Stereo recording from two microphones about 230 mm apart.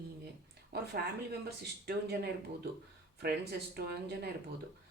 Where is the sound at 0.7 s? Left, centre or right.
Right.